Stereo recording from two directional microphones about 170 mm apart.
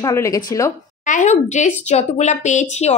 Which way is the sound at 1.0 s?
45° left (ahead or behind).